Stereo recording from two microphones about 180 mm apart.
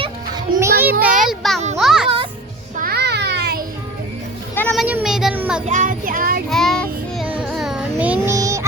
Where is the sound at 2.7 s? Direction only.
55° right (ahead or behind).